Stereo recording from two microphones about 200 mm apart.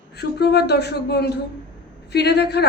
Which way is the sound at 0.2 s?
55° left (ahead or behind).